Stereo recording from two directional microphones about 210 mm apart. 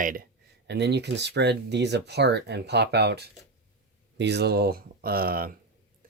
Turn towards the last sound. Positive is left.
turn(degrees=-45)  # may be behind; listen again after turning